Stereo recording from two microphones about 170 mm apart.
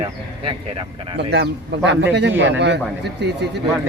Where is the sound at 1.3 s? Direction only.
85° right.